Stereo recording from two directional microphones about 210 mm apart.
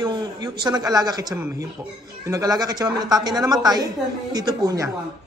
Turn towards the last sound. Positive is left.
turn(degrees=-15)  # may be behind; listen again after turning